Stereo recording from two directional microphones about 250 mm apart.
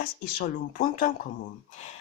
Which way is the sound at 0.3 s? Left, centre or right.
Left.